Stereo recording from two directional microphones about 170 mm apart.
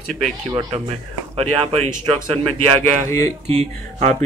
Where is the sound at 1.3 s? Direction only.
35° right (ahead or behind).